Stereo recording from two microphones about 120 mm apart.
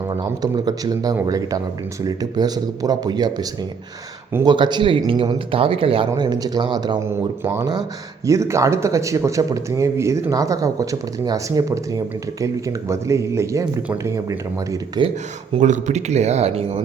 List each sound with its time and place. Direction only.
0.2 s speech: 35° right (ahead or behind)
6.1 s speech: 35° right (ahead or behind)
7.0 s speech: 25° right (ahead or behind)
15.5 s speech: 85° right; by 16.8 s 60° right (ahead or behind)